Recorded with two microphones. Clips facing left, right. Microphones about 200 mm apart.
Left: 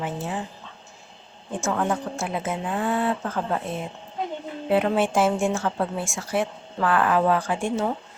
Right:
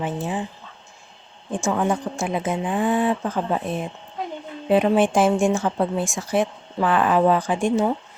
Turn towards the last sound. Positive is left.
turn(degrees=-15)  # may be behind; listen again after turning